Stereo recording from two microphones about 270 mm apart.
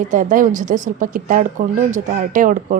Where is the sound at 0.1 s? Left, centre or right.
Right.